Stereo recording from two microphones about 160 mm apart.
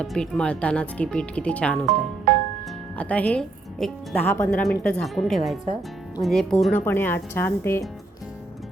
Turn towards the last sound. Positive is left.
turn(degrees=15)  # may be behind; listen again after turning